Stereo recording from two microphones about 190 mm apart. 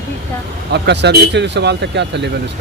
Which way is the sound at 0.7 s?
65° right (ahead or behind).